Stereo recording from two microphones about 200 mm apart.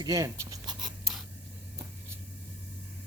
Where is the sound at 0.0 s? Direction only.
15° right (ahead or behind).